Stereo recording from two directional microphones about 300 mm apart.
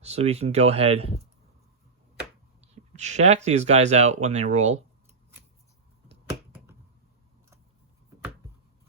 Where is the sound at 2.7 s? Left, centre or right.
Right.